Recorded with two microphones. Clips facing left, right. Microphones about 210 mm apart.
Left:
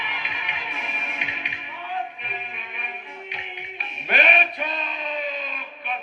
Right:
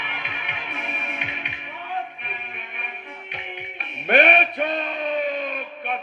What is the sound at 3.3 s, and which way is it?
Music, 60° right (ahead or behind).